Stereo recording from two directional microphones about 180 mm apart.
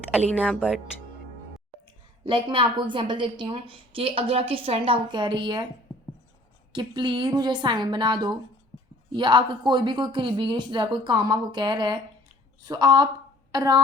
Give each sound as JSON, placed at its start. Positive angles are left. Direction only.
{"t": 0.3, "sound": "speech", "side_deg": 5}
{"t": 2.2, "sound": "a woman's voice", "side_deg": -30}
{"t": 6.7, "sound": "a woman's voice", "side_deg": -25}